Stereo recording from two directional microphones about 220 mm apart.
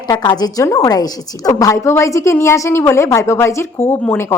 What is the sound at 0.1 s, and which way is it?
A woman's voice, 20° left (ahead or behind).